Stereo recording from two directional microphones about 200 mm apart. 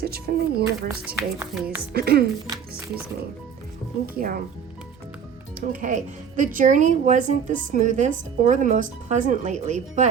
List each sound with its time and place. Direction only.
0.0 s speech: 50° right (ahead or behind)
0.9 s a woman's voice: 10° right (ahead or behind)
1.9 s speech: 50° right (ahead or behind)
4.0 s speech: 45° right (ahead or behind)
5.5 s speech: 40° right (ahead or behind)